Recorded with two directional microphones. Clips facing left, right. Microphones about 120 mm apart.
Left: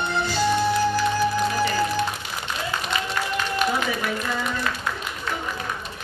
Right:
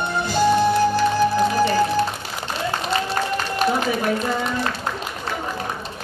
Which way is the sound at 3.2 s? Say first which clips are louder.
Right 4 dB; 40° right (ahead or behind).